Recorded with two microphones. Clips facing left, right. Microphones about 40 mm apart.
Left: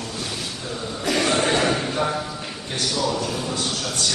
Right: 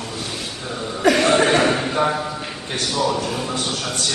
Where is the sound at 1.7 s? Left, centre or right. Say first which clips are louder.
Right 4 dB; centre.